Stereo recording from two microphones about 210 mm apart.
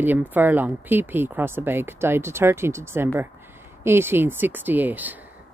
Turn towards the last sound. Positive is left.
turn(degrees=-10)  # may be behind; listen again after turning